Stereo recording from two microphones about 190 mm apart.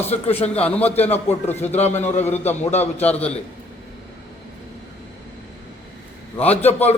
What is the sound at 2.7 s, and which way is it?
Speech, 35° left (ahead or behind).